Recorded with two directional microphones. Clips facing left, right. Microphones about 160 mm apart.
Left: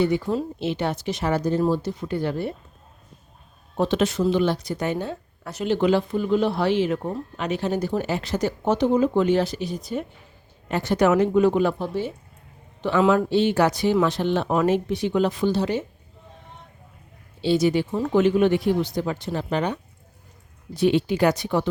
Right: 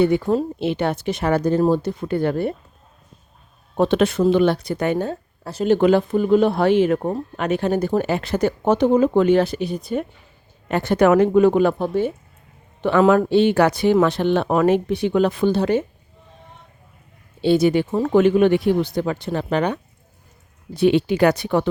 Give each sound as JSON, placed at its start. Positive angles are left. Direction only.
{"t": 0.0, "sound": "speech", "side_deg": -55}
{"t": 3.8, "sound": "speech", "side_deg": -60}
{"t": 5.4, "sound": "a sound", "side_deg": -35}
{"t": 5.6, "sound": "speech", "side_deg": -50}
{"t": 17.4, "sound": "speech", "side_deg": -55}